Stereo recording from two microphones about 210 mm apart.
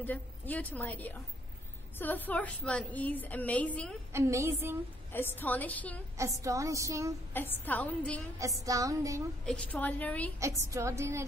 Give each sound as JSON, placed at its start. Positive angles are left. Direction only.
{"t": 0.0, "sound": "a woman's voice", "side_deg": 10}
{"t": 4.1, "sound": "a woman's voice", "side_deg": -15}
{"t": 5.1, "sound": "a woman's voice", "side_deg": 10}
{"t": 6.1, "sound": "a woman's voice", "side_deg": -15}
{"t": 7.3, "sound": "a woman's voice", "side_deg": 10}
{"t": 8.4, "sound": "a woman's voice", "side_deg": -15}
{"t": 9.5, "sound": "a woman's voice", "side_deg": 5}
{"t": 10.4, "sound": "a woman's voice", "side_deg": -15}